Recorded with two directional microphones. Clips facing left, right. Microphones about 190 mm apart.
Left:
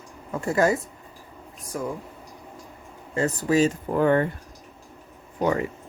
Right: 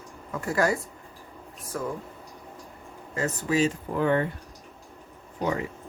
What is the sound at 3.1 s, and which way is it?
Speech, 35° left (ahead or behind).